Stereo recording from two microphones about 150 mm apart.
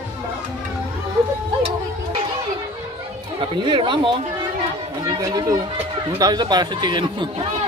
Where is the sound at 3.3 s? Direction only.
35° right (ahead or behind).